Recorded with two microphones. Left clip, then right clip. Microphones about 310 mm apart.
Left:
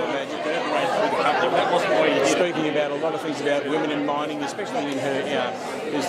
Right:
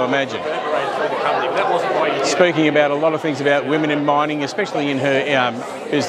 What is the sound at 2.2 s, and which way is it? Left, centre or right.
A man's voice, right.